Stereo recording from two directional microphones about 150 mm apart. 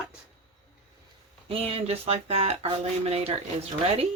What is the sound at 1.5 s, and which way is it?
Speech, 40° right (ahead or behind).